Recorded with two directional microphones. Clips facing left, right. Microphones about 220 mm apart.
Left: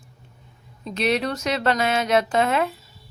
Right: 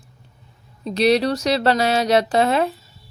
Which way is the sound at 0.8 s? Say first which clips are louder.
Right 6 dB; 35° right (ahead or behind).